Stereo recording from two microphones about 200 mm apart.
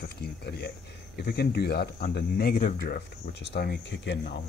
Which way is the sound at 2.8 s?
55° left (ahead or behind).